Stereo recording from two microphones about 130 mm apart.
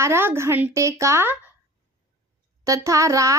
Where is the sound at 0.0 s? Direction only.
20° right (ahead or behind).